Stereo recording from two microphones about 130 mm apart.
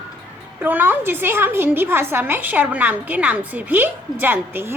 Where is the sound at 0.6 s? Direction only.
15° right (ahead or behind).